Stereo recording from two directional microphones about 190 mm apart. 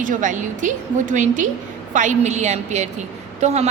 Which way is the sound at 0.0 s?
40° right (ahead or behind).